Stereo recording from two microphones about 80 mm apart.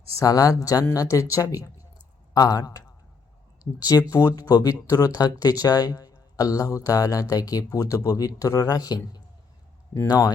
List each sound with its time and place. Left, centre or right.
0.2 s speech: left
4.1 s speech: left